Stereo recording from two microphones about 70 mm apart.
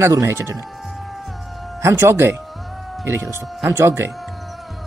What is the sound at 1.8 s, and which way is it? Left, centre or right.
Speech, right.